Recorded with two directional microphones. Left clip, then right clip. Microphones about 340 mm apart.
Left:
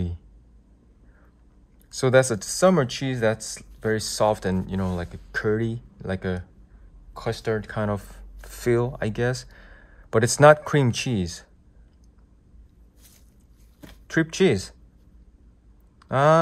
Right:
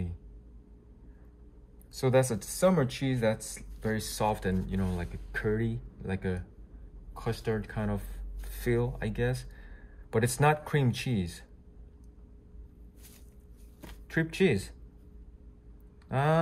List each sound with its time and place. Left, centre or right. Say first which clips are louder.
1.9 s speech: left 8 dB; centre
14.0 s speech: left 7 dB; centre
16.1 s speech: left 11 dB; centre